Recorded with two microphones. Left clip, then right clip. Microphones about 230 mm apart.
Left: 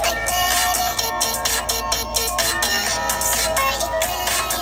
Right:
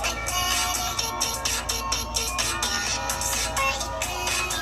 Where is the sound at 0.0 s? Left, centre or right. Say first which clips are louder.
Left 7 dB; left.